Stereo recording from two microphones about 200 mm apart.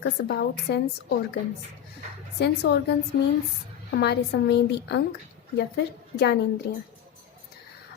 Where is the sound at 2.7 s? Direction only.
50° left (ahead or behind).